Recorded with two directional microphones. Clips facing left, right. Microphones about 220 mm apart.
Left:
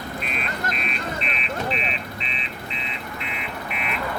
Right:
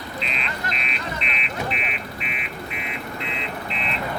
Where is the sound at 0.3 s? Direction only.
50° left (ahead or behind); by 2.5 s 30° left (ahead or behind).